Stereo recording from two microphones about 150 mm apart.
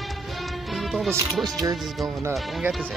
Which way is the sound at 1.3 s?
Centre (ahead or behind).